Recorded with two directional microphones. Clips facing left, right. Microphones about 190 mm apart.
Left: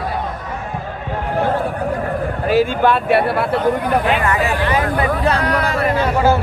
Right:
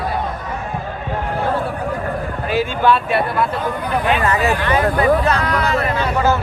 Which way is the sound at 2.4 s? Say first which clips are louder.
Left 2 dB; 45° left (ahead or behind).